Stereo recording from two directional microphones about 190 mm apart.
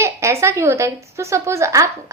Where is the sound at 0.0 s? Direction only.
15° right (ahead or behind).